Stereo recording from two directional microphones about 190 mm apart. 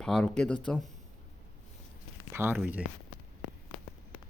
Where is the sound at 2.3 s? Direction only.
10° right (ahead or behind).